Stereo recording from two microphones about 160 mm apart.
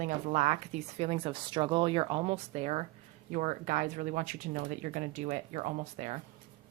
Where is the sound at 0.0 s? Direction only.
50° right (ahead or behind).